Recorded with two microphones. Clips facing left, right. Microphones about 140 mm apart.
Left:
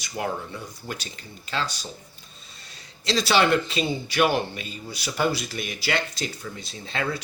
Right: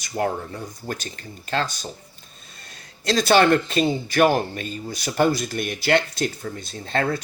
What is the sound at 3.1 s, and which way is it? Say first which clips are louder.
Speech: right 4 dB; 50° right (ahead or behind).